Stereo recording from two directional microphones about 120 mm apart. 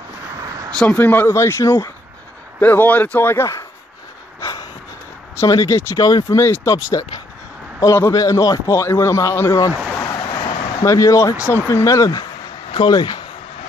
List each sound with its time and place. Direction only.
0.7 s a man's voice: 10° left (ahead or behind)
4.4 s a sound: 30° left (ahead or behind)
5.3 s a man's voice: 25° left (ahead or behind)
9.9 s a sound: 30° left (ahead or behind)
10.2 s vehicle: 40° left (ahead or behind)
10.8 s a man's voice: 25° left (ahead or behind)
12.7 s speech: 40° left (ahead or behind)